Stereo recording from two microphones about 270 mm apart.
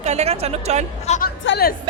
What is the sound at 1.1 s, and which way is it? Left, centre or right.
Speech, left.